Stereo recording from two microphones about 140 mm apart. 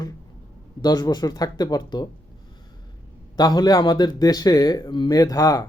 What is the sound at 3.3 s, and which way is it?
Speech, 30° left (ahead or behind).